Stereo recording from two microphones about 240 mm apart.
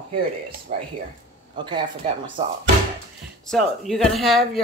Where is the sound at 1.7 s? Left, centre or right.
Centre.